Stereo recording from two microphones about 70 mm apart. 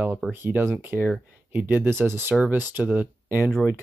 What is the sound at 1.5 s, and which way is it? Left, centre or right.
Speech, right.